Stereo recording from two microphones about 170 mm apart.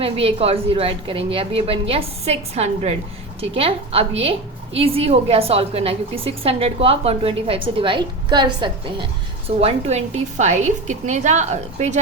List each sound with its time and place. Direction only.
0.0 s a woman's voice: 35° right (ahead or behind)